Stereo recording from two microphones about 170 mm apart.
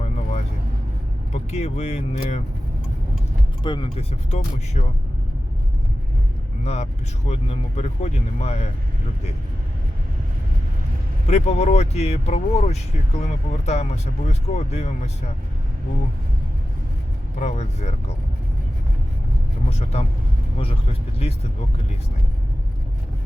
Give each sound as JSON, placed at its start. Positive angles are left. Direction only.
{"t": 0.0, "sound": "vehicle", "side_deg": 40}
{"t": 1.3, "sound": "speech", "side_deg": 40}
{"t": 3.6, "sound": "speech", "side_deg": 30}
{"t": 7.3, "sound": "speech", "side_deg": 40}
{"t": 11.3, "sound": "speech", "side_deg": 40}
{"t": 17.4, "sound": "speech", "side_deg": 40}
{"t": 19.7, "sound": "speech", "side_deg": 40}
{"t": 21.2, "sound": "speech", "side_deg": 35}